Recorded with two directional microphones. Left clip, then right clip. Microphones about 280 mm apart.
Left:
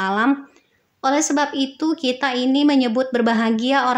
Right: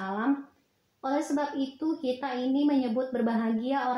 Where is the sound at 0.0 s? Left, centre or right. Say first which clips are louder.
Left 11 dB; right.